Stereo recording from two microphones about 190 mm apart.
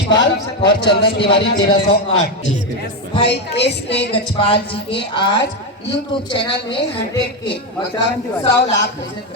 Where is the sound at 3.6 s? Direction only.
65° left (ahead or behind).